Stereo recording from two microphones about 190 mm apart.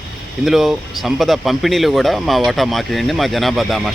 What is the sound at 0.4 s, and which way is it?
Speech, centre (ahead or behind).